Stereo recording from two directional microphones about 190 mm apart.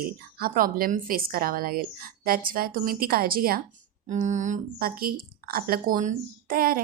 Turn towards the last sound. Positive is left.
turn(degrees=-50)  # may be behind; listen again after turning